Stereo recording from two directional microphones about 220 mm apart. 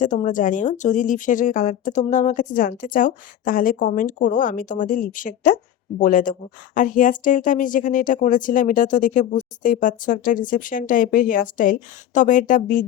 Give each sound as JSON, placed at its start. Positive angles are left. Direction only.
{"t": 0.0, "sound": "speech", "side_deg": 35}